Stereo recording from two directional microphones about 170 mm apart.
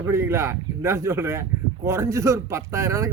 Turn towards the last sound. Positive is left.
turn(degrees=-15)  # may be behind; listen again after turning